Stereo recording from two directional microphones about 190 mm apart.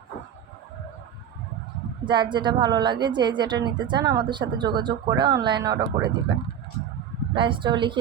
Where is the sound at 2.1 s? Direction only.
25° right (ahead or behind).